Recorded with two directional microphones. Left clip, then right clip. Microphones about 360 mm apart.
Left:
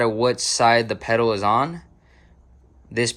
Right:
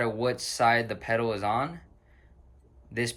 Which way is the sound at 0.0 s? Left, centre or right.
Centre.